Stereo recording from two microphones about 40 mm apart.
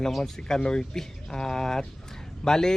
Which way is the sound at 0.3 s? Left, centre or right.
Centre.